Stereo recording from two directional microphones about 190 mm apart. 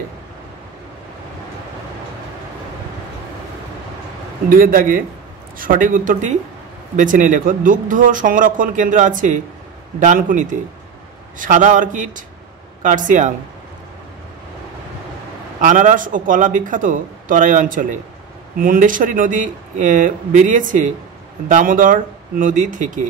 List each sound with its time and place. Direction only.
4.5 s a man's voice: 50° right (ahead or behind)
15.6 s speech: 45° right (ahead or behind)